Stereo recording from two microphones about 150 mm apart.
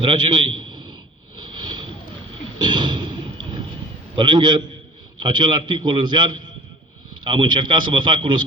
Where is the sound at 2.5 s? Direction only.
30° right (ahead or behind).